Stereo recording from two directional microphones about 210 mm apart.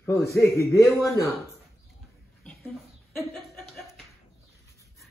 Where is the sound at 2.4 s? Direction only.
Centre (ahead or behind).